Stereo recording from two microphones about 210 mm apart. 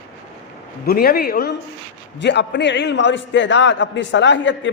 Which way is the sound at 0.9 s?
45° left (ahead or behind).